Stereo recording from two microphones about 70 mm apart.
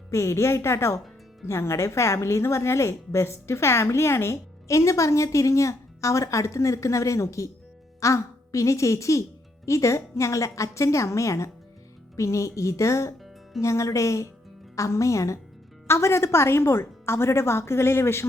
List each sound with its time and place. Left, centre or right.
0.1 s a woman's voice: left